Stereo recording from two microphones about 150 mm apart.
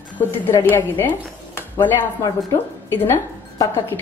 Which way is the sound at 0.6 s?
15° left (ahead or behind).